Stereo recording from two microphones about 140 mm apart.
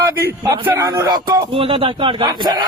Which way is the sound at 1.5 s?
40° right (ahead or behind).